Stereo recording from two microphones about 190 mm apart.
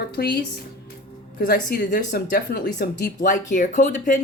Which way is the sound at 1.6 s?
50° left (ahead or behind).